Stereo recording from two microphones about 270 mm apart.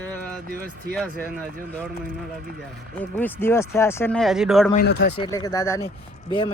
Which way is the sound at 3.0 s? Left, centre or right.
Centre.